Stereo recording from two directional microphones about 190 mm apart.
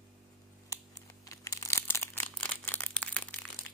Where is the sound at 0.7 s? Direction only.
15° left (ahead or behind).